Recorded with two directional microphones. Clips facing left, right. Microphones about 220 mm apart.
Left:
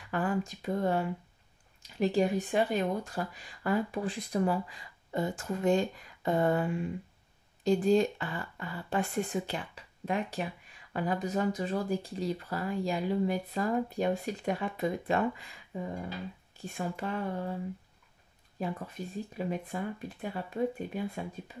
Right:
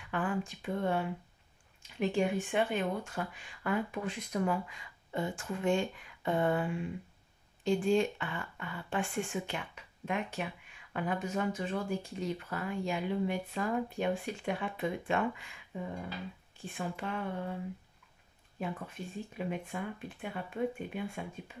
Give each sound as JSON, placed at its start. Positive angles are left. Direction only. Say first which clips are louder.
{"t": 0.1, "sound": "speech", "louder": "left 3 dB", "side_deg": 40}
{"t": 18.6, "sound": "speech", "louder": "left 3 dB", "side_deg": 40}